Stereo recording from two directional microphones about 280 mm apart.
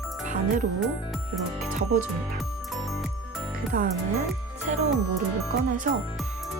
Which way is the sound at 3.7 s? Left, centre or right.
Right.